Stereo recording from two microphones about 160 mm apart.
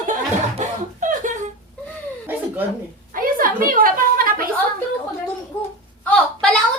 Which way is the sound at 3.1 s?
60° right (ahead or behind).